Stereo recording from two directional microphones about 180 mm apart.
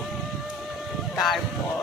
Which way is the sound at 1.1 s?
Centre (ahead or behind).